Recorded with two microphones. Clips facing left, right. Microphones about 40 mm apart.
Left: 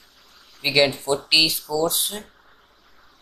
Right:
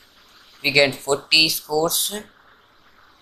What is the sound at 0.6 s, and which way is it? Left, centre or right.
Speech, right.